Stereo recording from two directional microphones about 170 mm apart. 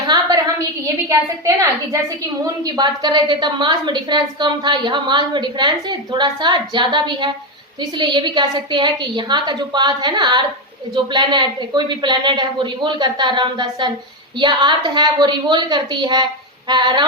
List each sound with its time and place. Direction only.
1.0 s a woman's voice: 20° right (ahead or behind)